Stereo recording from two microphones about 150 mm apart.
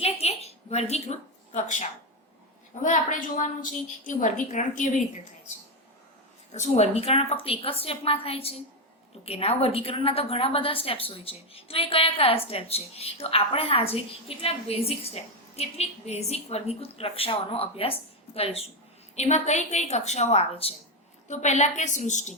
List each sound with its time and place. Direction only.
0.0 s a sound: 45° left (ahead or behind)
2.8 s a woman's voice: 55° left (ahead or behind)
6.5 s a woman's voice: 45° left (ahead or behind)